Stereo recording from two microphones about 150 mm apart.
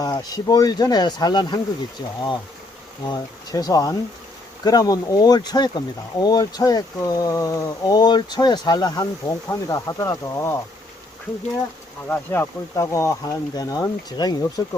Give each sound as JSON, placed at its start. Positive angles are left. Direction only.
{"t": 0.0, "sound": "speech", "side_deg": 25}
{"t": 3.1, "sound": "speech", "side_deg": 25}
{"t": 12.0, "sound": "speech", "side_deg": 15}